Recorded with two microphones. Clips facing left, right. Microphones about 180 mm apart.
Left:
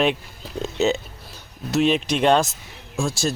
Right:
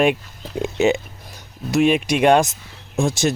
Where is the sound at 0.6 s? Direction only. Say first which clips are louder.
Right 3 dB; 10° right (ahead or behind).